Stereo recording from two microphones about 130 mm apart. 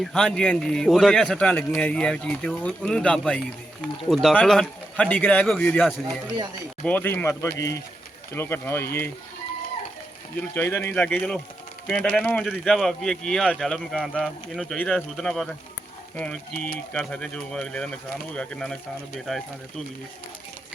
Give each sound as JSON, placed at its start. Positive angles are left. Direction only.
{"t": 0.0, "sound": "a man's voice", "side_deg": 0}
{"t": 6.8, "sound": "a man's voice", "side_deg": 15}
{"t": 10.5, "sound": "a man's voice", "side_deg": 15}